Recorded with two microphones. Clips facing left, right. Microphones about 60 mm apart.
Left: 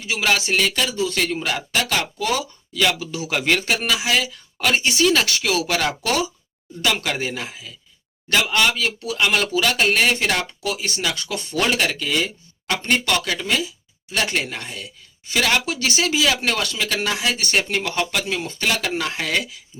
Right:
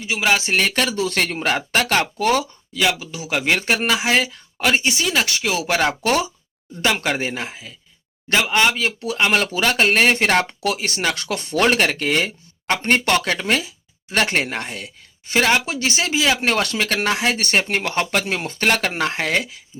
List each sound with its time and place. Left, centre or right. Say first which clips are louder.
0.0 s speech: right 2 dB; centre
0.4 s speech: right 1 dB; right
0.7 s speech: right 2 dB; right
2.7 s speech: even; centre
3.7 s speech: right 2 dB; right
4.5 s speech: right 1 dB; centre; by 10.4 s right
10.6 s speech: right 3 dB; right
11.5 s speech: right 4 dB; right
17.5 s speech: right 2 dB; right